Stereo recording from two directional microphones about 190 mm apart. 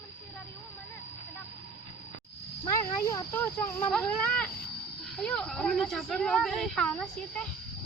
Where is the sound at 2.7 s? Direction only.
15° left (ahead or behind).